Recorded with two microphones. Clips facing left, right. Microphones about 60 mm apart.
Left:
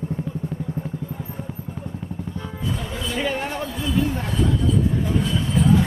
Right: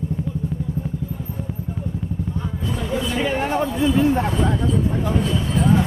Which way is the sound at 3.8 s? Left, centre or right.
Right.